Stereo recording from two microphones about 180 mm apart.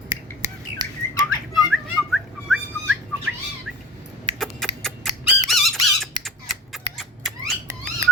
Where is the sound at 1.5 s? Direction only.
Centre (ahead or behind).